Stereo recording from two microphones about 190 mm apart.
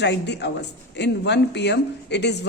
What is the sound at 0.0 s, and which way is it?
A woman's voice, 65° left (ahead or behind).